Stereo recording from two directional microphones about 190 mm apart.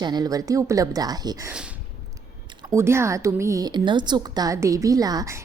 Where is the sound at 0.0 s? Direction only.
20° right (ahead or behind).